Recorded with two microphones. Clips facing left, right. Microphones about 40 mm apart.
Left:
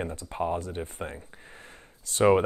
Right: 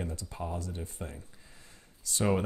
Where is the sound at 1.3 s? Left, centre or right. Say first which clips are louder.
Left 9 dB; left.